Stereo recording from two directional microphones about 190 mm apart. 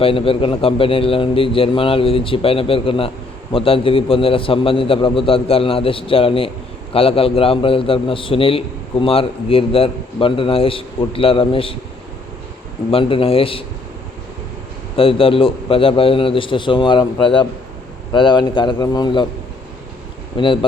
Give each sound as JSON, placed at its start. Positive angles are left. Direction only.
{"t": 0.0, "sound": "a man's voice", "side_deg": 30}
{"t": 12.9, "sound": "a man's voice", "side_deg": 30}
{"t": 14.9, "sound": "a man's voice", "side_deg": 30}
{"t": 20.3, "sound": "a man's voice", "side_deg": 25}